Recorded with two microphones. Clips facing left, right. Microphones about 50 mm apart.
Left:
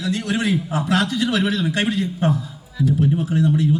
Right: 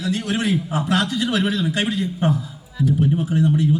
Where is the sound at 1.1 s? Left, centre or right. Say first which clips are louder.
Left 1 dB; centre.